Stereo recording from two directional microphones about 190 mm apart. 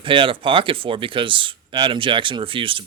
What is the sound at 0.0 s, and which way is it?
Speech, 25° right (ahead or behind).